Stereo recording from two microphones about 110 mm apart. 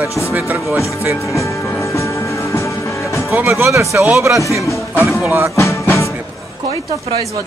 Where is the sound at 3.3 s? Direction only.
20° right (ahead or behind).